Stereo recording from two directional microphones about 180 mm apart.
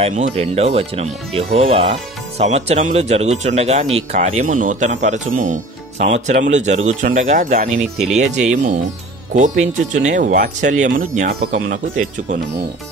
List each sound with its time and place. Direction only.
0.0 s speech: 40° right (ahead or behind)